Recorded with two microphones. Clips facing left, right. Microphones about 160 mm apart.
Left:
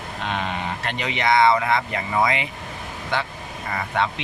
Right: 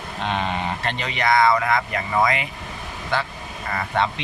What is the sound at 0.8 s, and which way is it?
Speech, 10° left (ahead or behind).